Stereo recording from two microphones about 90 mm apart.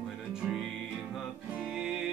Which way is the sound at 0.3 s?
5° right (ahead or behind).